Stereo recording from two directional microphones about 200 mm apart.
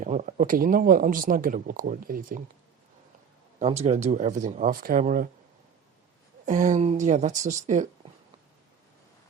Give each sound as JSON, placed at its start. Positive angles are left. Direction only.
{"t": 0.0, "sound": "speech", "side_deg": -40}
{"t": 3.6, "sound": "speech", "side_deg": -30}
{"t": 6.4, "sound": "speech", "side_deg": -40}